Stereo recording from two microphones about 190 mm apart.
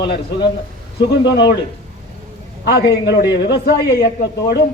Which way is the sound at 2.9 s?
60° left (ahead or behind).